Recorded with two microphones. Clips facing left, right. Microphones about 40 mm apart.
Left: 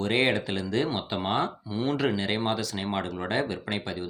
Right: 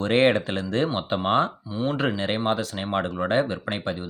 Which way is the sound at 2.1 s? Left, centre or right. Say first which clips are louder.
Right 3 dB; right.